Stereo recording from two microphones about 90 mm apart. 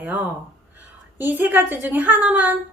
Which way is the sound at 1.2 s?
20° right (ahead or behind).